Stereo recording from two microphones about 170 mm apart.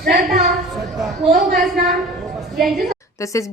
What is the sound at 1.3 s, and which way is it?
Speech, 60° right (ahead or behind).